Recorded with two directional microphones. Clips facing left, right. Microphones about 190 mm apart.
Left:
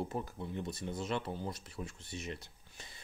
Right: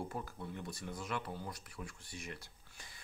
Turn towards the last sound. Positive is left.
turn(degrees=25)  # may be behind; listen again after turning